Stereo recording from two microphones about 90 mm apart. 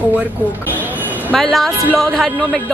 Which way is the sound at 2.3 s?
15° left (ahead or behind).